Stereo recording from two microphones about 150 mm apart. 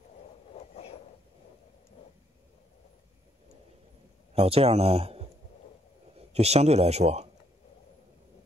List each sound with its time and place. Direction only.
4.4 s speech: 40° right (ahead or behind)
6.3 s speech: 45° right (ahead or behind)